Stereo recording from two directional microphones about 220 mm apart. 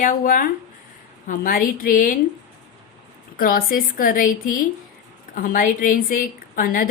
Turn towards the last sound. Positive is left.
turn(degrees=40)  # may be behind; listen again after turning